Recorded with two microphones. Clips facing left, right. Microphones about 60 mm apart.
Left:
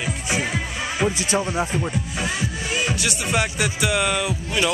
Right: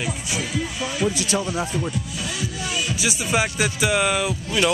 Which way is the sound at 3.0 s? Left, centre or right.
Centre.